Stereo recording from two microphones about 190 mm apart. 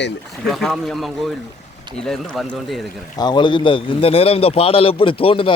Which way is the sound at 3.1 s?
25° left (ahead or behind).